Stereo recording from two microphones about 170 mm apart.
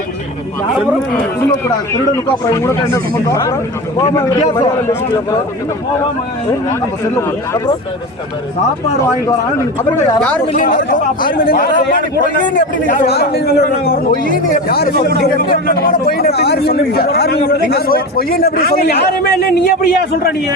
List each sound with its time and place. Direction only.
1.4 s speech: 15° left (ahead or behind)
10.2 s speech: 5° left (ahead or behind)
10.6 s a man's voice: 55° left (ahead or behind)
13.1 s a man's voice: 65° left (ahead or behind)